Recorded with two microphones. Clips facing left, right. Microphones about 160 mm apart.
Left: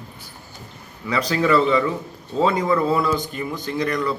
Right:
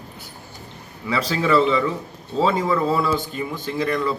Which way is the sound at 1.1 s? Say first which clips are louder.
Left 1 dB; 5° right (ahead or behind).